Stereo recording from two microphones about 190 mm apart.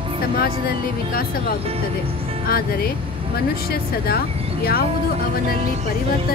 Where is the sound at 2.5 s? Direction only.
55° left (ahead or behind).